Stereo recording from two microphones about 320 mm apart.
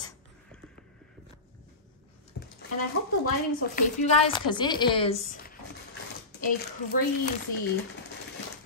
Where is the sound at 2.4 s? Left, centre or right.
Left.